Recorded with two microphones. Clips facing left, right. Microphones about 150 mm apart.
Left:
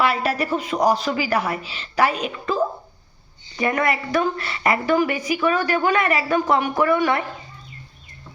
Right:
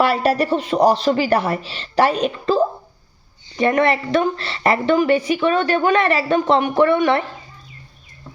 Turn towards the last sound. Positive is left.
turn(degrees=-25)  # may be behind; listen again after turning